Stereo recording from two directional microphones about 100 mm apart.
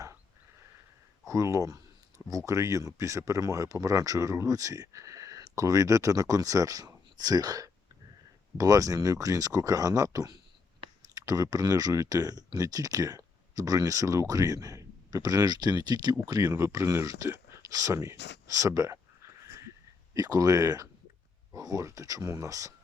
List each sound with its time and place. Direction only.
1.3 s a sound: 30° right (ahead or behind)
2.5 s speech: 30° right (ahead or behind)
20.1 s speech: 35° right (ahead or behind)